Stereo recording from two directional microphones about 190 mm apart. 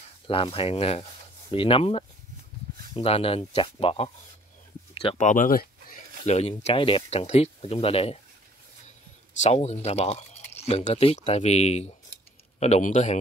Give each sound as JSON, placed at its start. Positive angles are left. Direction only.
{"t": 0.3, "sound": "speech", "side_deg": 30}
{"t": 6.2, "sound": "speech", "side_deg": 35}
{"t": 9.4, "sound": "speech", "side_deg": 35}